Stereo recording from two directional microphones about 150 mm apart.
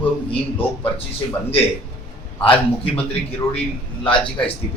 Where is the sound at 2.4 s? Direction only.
35° left (ahead or behind).